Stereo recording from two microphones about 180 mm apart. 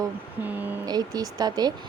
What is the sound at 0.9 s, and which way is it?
Speech, 20° right (ahead or behind).